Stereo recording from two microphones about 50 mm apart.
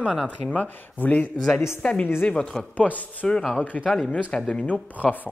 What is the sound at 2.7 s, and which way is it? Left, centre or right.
Speech, left.